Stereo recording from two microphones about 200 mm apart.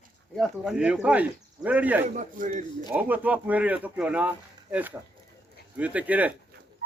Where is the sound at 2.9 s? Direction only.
10° right (ahead or behind).